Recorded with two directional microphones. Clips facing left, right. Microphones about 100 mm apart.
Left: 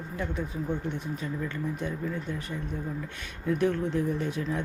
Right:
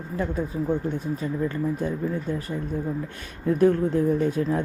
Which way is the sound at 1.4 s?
40° right (ahead or behind).